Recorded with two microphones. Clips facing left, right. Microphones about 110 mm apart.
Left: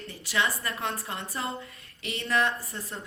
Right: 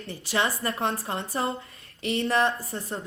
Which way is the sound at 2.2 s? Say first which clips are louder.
Right 1 dB; 30° right (ahead or behind).